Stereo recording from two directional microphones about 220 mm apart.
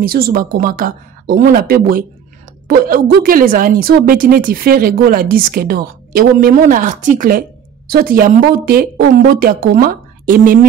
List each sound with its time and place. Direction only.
0.0 s a woman's voice: 40° right (ahead or behind)